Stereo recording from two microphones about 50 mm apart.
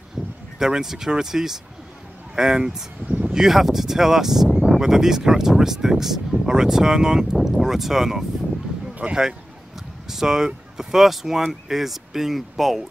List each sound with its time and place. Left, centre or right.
0.6 s speech: centre
3.1 s a sound: right
3.3 s speech: centre
7.3 s speech: centre